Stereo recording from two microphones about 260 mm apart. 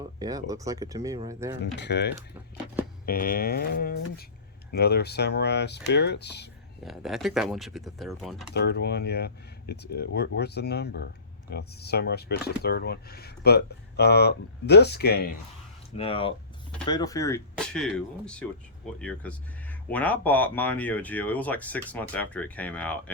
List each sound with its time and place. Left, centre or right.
0.2 s speech: centre
1.6 s speech: left
3.1 s speech: left
6.8 s speech: centre
8.5 s speech: left
16.0 s speech: left
17.5 s music: centre
17.9 s speech: centre